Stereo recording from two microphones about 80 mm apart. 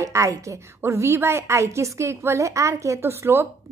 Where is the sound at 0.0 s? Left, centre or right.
Right.